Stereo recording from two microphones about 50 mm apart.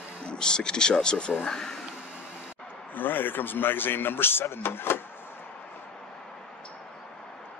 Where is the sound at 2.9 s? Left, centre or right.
Left.